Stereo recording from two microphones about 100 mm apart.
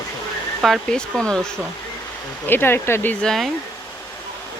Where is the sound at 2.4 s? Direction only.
20° left (ahead or behind).